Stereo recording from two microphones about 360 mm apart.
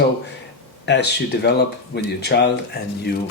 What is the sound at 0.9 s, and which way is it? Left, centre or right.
Speech, left.